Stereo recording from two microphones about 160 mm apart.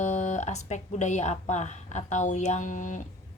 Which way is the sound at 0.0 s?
50° left (ahead or behind).